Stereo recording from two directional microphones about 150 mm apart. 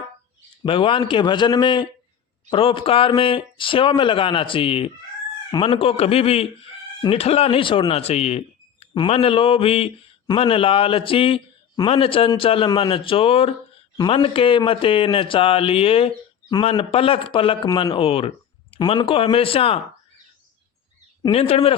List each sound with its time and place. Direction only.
0.6 s speech: 35° left (ahead or behind)
21.2 s speech: 40° left (ahead or behind)